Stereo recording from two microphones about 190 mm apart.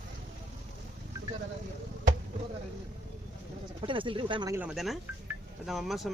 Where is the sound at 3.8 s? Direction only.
25° right (ahead or behind).